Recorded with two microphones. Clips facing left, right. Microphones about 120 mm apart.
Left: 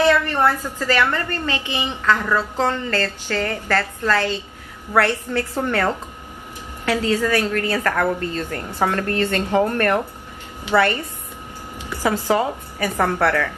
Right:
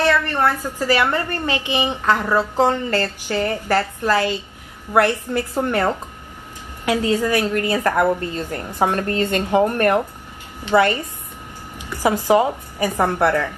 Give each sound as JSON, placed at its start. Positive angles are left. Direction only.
{"t": 0.1, "sound": "a woman's voice", "side_deg": 15}
{"t": 0.5, "sound": "a woman's voice", "side_deg": -15}
{"t": 11.8, "sound": "a sound", "side_deg": -15}
{"t": 12.3, "sound": "a woman's voice", "side_deg": -20}